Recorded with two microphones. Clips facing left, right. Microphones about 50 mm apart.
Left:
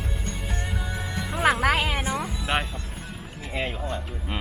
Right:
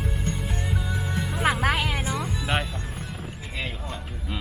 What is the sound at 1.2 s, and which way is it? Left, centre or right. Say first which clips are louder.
Music: left 3 dB; centre.